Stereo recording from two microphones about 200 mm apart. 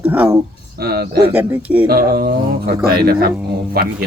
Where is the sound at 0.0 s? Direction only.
10° right (ahead or behind).